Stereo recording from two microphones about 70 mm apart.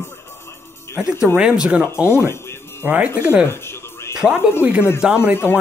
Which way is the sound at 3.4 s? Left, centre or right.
Left.